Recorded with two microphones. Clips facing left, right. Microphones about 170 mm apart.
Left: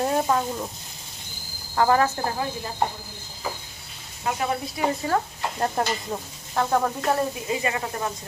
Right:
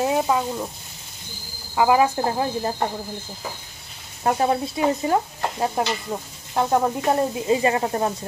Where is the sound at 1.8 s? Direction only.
10° right (ahead or behind).